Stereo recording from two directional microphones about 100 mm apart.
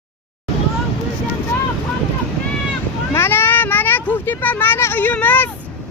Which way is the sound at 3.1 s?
25° left (ahead or behind).